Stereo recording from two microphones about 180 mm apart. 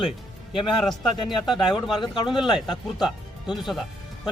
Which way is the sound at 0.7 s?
Centre (ahead or behind).